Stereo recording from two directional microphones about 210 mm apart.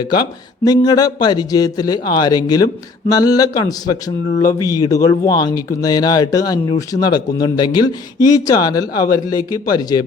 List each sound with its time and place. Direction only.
0.6 s speech: 20° left (ahead or behind)